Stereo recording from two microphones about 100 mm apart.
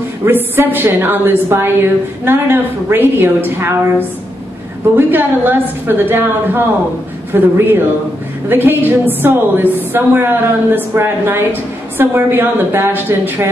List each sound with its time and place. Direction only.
0.2 s a woman's voice: 20° right (ahead or behind)
4.9 s a woman's voice: 20° right (ahead or behind)